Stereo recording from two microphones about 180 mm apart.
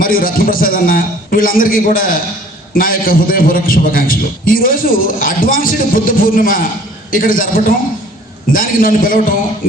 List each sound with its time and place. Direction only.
0.0 s a man's voice: 50° left (ahead or behind)